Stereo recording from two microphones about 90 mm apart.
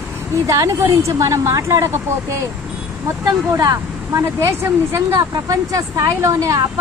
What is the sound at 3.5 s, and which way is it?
Speech, 40° right (ahead or behind).